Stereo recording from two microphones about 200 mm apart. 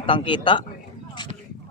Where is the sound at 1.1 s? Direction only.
20° left (ahead or behind).